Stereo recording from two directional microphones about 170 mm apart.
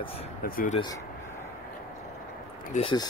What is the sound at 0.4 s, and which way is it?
Speech, 60° left (ahead or behind).